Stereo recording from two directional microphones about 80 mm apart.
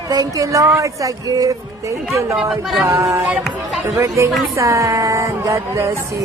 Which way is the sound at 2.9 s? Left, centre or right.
Right.